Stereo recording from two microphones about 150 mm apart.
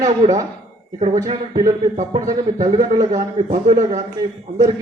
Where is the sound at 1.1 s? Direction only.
25° right (ahead or behind).